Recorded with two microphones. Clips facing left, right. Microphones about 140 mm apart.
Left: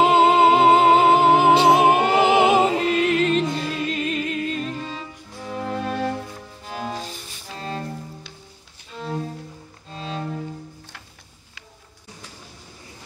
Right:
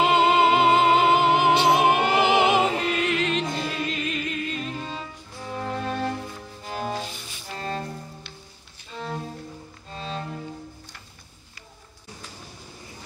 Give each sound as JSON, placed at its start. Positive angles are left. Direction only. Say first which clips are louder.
{"t": 0.0, "sound": "music", "louder": "left 4 dB", "side_deg": 40}
{"t": 1.9, "sound": "music", "louder": "left 3 dB", "side_deg": 0}
{"t": 2.1, "sound": "music", "louder": "left 3 dB", "side_deg": 40}
{"t": 3.4, "sound": "music", "louder": "left 3 dB", "side_deg": 0}
{"t": 3.8, "sound": "music", "louder": "left 4 dB", "side_deg": 40}
{"t": 4.7, "sound": "music", "louder": "left 1 dB", "side_deg": 0}
{"t": 7.5, "sound": "cello", "louder": "even", "side_deg": 0}
{"t": 8.9, "sound": "music", "louder": "left 3 dB", "side_deg": 0}